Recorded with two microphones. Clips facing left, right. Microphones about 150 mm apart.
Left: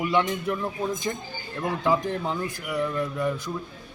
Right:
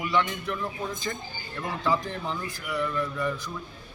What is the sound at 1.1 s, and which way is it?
A man's voice, 20° left (ahead or behind).